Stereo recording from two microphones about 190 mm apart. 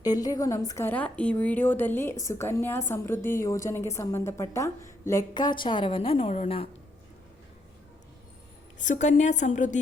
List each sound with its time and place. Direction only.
0.0 s speech: 20° left (ahead or behind)
8.8 s a woman's voice: 40° left (ahead or behind)